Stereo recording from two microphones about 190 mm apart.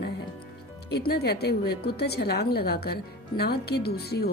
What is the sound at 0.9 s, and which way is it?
A woman's voice, 55° left (ahead or behind).